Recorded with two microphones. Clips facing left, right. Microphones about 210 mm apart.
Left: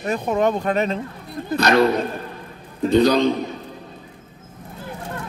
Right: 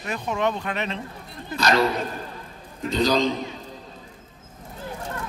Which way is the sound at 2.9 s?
60° left (ahead or behind).